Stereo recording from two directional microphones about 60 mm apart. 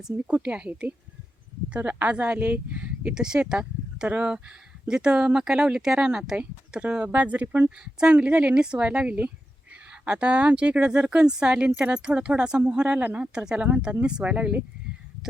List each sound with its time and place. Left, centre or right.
0.3 s speech: right
3.2 s speech: centre